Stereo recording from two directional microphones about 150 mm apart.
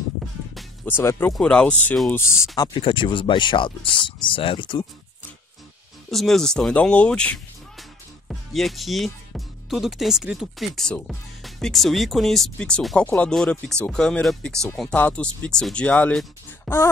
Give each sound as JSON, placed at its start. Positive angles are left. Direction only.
{"t": 0.8, "sound": "speech", "side_deg": 15}
{"t": 2.5, "sound": "speech", "side_deg": 30}
{"t": 6.0, "sound": "speech", "side_deg": 0}